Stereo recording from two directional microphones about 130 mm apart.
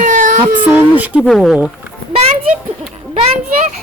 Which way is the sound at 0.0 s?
75° right (ahead or behind).